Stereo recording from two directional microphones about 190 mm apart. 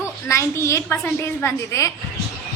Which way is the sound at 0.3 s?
15° left (ahead or behind).